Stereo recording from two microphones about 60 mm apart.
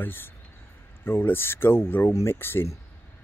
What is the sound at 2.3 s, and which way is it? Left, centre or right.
Speech, left.